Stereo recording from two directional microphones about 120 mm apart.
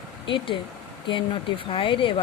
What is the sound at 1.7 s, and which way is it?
Speech, 50° left (ahead or behind).